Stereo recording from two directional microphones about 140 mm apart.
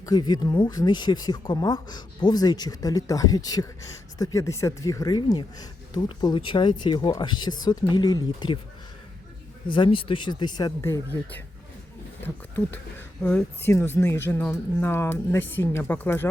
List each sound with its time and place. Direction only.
0.0 s speech: 30° left (ahead or behind)
9.6 s speech: 35° left (ahead or behind); by 16.3 s 15° left (ahead or behind)